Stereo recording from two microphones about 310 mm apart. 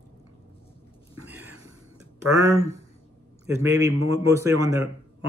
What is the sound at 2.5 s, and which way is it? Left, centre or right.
Speech, centre.